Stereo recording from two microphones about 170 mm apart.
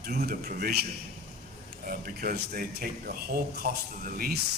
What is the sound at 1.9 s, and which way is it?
Speech, 55° right (ahead or behind).